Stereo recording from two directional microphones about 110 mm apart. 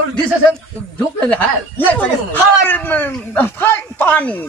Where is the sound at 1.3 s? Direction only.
15° left (ahead or behind).